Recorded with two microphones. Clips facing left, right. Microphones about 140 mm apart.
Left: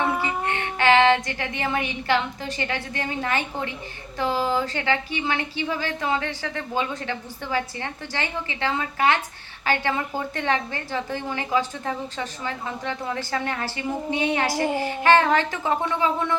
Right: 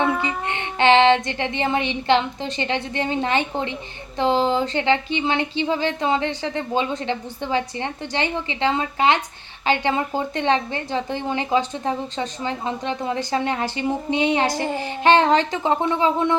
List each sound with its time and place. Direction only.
0.0 s child singing: 20° right (ahead or behind)
4.2 s a woman's voice: 25° right (ahead or behind)